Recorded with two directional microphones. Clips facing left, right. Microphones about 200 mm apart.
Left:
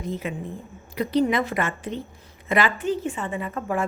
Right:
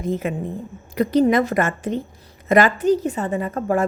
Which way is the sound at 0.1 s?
50° right (ahead or behind).